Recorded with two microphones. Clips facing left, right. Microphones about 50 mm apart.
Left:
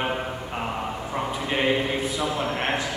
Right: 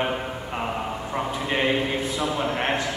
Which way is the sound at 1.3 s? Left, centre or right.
Centre.